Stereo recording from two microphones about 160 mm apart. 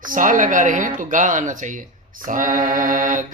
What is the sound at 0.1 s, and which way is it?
Speech, 55° right (ahead or behind).